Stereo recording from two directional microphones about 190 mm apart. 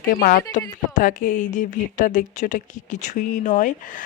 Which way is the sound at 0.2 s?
45° left (ahead or behind).